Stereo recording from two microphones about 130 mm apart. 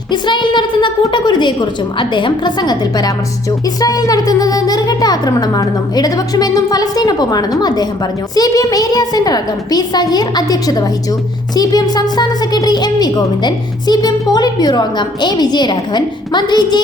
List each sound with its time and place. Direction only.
0.1 s a woman's voice: 35° left (ahead or behind)